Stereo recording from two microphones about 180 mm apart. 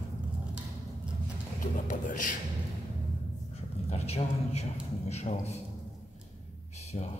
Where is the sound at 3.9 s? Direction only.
35° left (ahead or behind).